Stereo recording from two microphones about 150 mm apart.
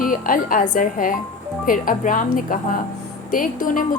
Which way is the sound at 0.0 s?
65° left (ahead or behind).